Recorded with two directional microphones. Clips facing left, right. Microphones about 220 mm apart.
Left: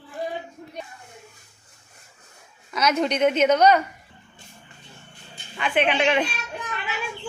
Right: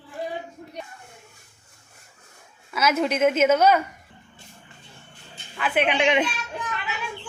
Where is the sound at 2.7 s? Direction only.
5° right (ahead or behind).